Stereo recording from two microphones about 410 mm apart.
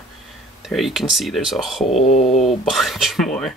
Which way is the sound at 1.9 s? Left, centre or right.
Centre.